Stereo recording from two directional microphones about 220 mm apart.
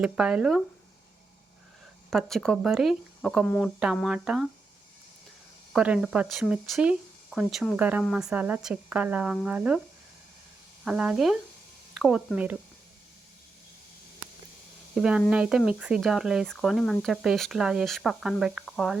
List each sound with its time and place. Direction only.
0.0 s speech: 5° right (ahead or behind)
2.0 s speech: centre (ahead or behind)
5.7 s speech: 5° right (ahead or behind)
10.8 s speech: 5° right (ahead or behind)
14.9 s speech: 5° right (ahead or behind)